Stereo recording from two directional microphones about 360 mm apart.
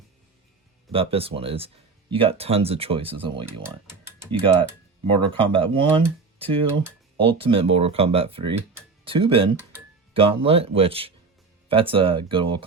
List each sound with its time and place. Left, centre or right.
0.9 s speech: centre